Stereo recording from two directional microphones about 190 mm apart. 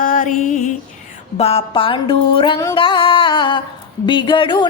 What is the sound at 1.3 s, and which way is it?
Music, 30° left (ahead or behind).